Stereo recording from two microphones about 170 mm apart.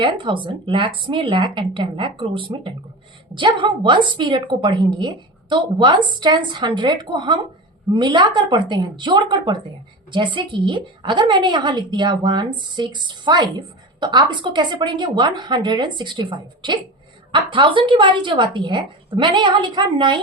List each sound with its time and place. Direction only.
0.0 s a woman's voice: 30° right (ahead or behind)